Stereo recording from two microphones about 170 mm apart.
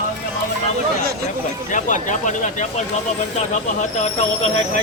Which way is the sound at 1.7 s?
45° left (ahead or behind).